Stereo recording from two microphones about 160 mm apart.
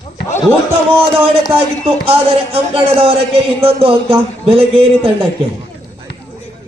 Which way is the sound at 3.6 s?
35° right (ahead or behind).